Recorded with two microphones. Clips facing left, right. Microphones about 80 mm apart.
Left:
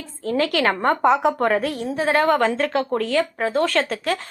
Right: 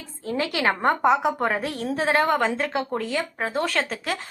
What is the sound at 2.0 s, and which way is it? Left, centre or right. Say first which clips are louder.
A woman's voice: left 3 dB; right.